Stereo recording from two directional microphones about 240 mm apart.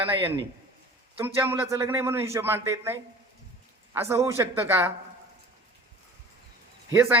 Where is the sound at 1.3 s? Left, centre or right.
Centre.